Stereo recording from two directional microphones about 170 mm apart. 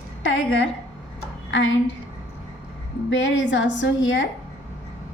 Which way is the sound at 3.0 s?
90° left.